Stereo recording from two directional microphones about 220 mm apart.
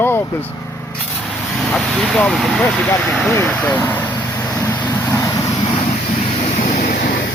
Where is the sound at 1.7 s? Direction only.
Centre (ahead or behind).